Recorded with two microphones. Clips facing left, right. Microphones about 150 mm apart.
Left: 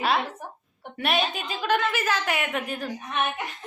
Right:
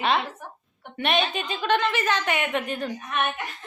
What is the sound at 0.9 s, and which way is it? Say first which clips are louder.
A woman's voice: right 1 dB; 5° left (ahead or behind).